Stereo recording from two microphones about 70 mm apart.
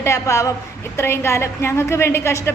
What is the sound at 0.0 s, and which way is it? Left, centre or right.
A man's voice, left.